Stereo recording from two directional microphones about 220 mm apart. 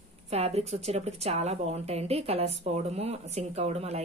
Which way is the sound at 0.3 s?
30° right (ahead or behind).